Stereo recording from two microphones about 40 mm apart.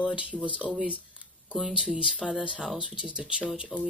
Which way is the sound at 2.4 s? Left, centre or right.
Right.